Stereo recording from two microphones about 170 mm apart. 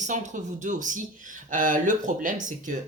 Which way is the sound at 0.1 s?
45° right (ahead or behind).